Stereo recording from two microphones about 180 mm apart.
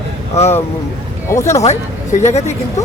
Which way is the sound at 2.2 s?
40° left (ahead or behind).